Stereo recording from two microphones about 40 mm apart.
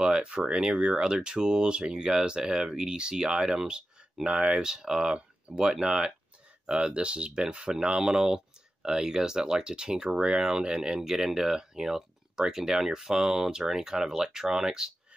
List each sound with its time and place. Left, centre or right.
0.0 s speech: right
5.1 s speech: right